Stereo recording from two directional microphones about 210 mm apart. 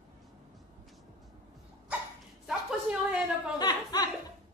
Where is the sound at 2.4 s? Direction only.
5° right (ahead or behind).